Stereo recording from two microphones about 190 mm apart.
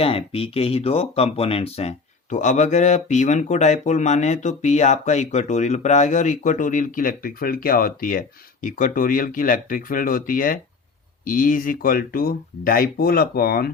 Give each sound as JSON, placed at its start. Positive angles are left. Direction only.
{"t": 0.0, "sound": "speech", "side_deg": 30}